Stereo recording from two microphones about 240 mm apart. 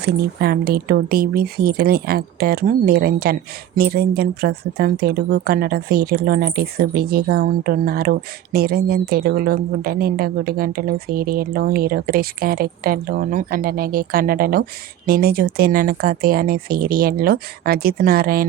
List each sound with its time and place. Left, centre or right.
0.0 s speech: right